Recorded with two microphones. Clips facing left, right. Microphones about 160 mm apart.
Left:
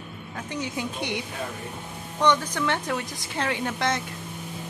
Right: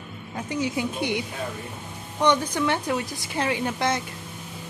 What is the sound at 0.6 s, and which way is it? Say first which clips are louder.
A woman's voice: right 4 dB; 5° right (ahead or behind).